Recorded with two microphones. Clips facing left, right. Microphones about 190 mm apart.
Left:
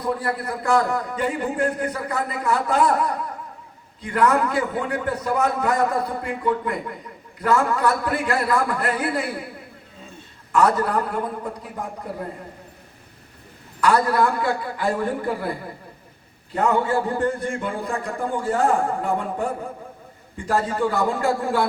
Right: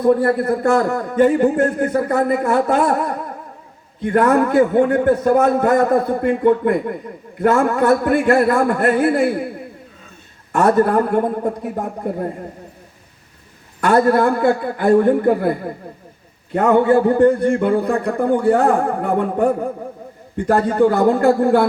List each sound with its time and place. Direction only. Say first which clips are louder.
0.0 s a man's voice: right 11 dB; 50° right (ahead or behind)
10.5 s a man's voice: right 5 dB; 55° right (ahead or behind)
13.8 s a man's voice: right 5 dB; 50° right (ahead or behind)